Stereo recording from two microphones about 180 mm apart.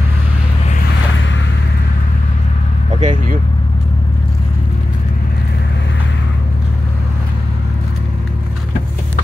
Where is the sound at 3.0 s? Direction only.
40° right (ahead or behind).